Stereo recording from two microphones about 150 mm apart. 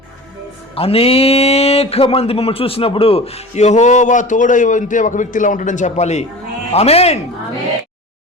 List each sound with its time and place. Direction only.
0.8 s speech: 40° left (ahead or behind)